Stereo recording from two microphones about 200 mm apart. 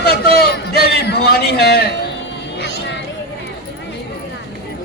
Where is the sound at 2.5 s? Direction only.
60° left (ahead or behind).